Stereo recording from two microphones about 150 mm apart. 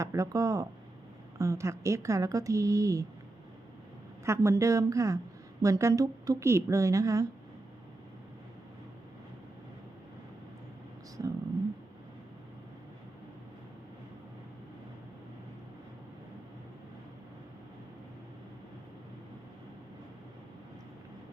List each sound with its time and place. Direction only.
0.0 s speech: 20° right (ahead or behind)
4.3 s speech: 20° right (ahead or behind)
11.2 s speech: 25° right (ahead or behind)